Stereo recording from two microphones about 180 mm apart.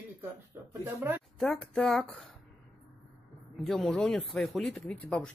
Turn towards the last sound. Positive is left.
turn(degrees=5)  # may be behind; listen again after turning